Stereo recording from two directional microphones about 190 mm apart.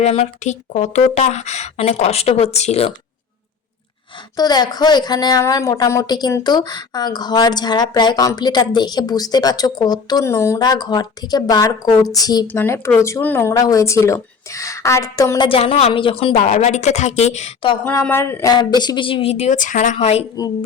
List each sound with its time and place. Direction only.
0.0 s a woman's voice: 35° left (ahead or behind)
4.4 s a woman's voice: 20° left (ahead or behind)
17.8 s a woman's voice: 10° left (ahead or behind); by 20.2 s 35° left (ahead or behind)
20.3 s a woman's voice: 20° left (ahead or behind)